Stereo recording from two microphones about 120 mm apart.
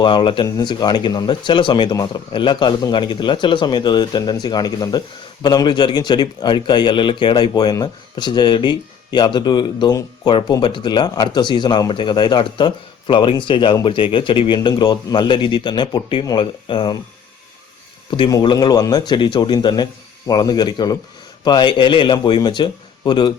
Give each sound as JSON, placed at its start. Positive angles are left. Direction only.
{"t": 0.0, "sound": "speech", "side_deg": 40}
{"t": 18.4, "sound": "speech", "side_deg": 35}